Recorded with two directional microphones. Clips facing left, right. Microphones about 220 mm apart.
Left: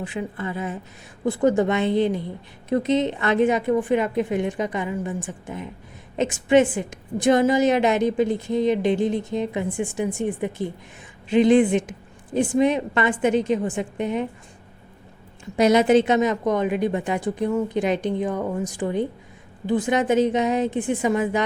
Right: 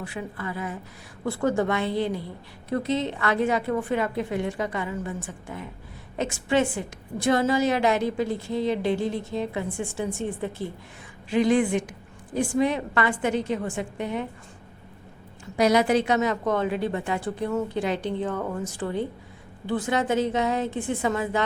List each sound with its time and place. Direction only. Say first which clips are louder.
0.0 s a woman's voice: left 4 dB; 20° left (ahead or behind)
15.5 s a woman's voice: left 4 dB; 20° left (ahead or behind)